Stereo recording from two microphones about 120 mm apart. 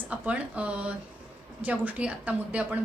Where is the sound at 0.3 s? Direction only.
10° right (ahead or behind).